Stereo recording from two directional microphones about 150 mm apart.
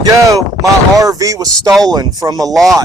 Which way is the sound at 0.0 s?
20° right (ahead or behind).